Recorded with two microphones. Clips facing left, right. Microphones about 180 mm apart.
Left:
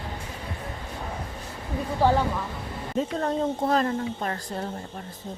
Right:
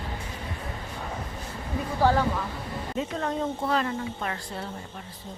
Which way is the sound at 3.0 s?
40° left (ahead or behind).